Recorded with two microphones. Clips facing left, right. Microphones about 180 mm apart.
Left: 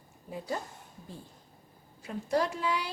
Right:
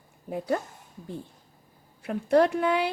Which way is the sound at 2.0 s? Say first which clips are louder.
Right 8 dB; 60° right (ahead or behind).